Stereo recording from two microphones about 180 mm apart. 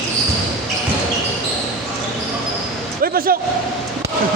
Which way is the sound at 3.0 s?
55° right (ahead or behind).